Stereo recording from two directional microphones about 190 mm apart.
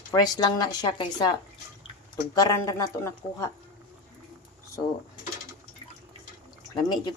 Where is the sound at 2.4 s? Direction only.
20° left (ahead or behind).